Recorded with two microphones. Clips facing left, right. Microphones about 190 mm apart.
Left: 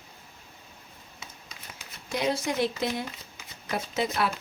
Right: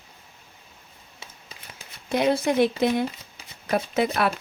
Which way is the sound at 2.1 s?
60° right (ahead or behind).